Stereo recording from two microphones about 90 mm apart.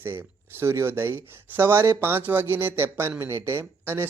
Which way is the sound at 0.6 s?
30° right (ahead or behind).